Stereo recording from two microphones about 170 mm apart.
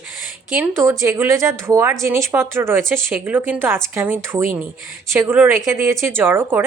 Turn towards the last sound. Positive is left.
turn(degrees=-10)  # may be behind; listen again after turning